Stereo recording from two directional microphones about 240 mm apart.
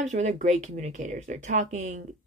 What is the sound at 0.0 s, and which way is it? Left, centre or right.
A woman's voice, right.